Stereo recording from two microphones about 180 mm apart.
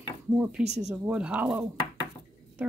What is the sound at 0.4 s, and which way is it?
Speech, 5° right (ahead or behind).